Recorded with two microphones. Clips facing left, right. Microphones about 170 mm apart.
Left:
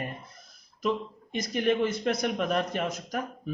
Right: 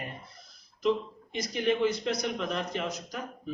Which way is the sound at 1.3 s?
50° left (ahead or behind).